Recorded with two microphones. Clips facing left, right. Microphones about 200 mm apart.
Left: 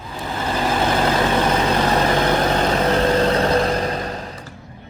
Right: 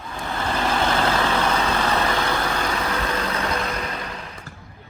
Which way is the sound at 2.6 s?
30° left (ahead or behind).